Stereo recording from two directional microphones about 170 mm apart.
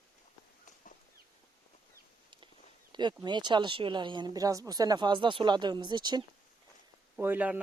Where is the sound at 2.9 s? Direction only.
25° right (ahead or behind).